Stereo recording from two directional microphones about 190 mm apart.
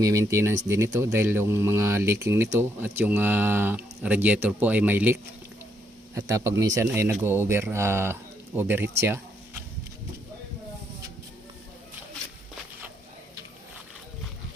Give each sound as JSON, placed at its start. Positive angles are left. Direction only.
{"t": 0.0, "sound": "speech", "side_deg": -15}